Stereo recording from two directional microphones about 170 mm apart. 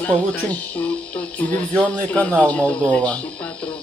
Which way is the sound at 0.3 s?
10° left (ahead or behind).